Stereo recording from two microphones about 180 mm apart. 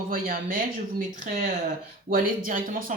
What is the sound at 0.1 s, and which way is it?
Speech, 50° right (ahead or behind).